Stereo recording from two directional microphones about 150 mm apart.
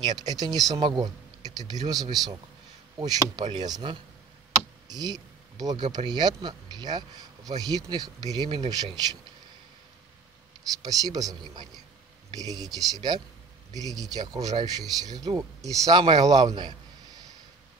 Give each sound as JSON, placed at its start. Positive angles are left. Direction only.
{"t": 0.0, "sound": "speech", "side_deg": -25}
{"t": 10.8, "sound": "speech", "side_deg": -25}